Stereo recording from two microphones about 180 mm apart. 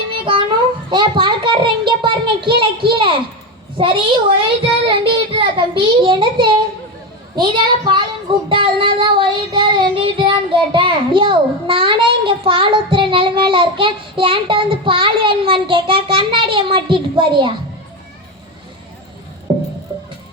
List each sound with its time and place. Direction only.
0.1 s child singing: 30° right (ahead or behind)
0.9 s a child's voice: 25° right (ahead or behind)
4.4 s a child's voice: 30° right (ahead or behind)
8.4 s child singing: 30° right (ahead or behind)
19.5 s music: 25° right (ahead or behind)